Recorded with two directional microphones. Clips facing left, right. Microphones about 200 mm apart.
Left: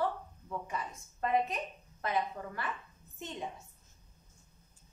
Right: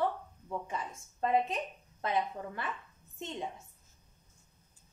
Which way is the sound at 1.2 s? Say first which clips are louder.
Right 1 dB; 25° right (ahead or behind).